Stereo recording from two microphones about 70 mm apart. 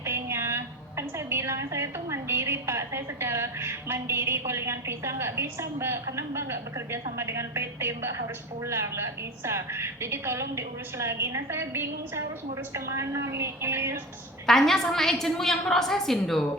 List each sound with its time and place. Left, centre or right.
0.0 s a sound: right
7.2 s a woman's voice: right
14.4 s a woman's voice: centre